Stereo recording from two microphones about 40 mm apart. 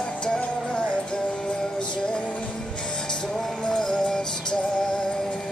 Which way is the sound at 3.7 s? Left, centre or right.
Left.